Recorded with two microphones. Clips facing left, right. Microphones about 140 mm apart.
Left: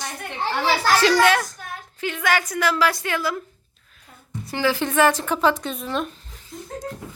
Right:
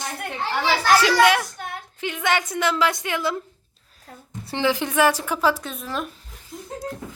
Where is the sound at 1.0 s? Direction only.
10° right (ahead or behind).